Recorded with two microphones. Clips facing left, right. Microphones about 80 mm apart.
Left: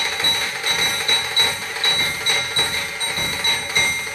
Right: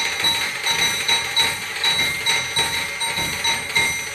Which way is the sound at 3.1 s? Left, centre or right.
Left.